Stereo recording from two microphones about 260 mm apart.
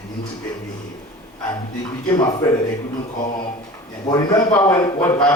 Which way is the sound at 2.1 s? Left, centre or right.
Centre.